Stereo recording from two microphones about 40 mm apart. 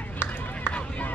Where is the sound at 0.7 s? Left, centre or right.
Left.